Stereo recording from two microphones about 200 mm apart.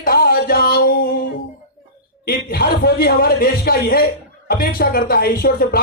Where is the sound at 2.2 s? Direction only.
50° left (ahead or behind).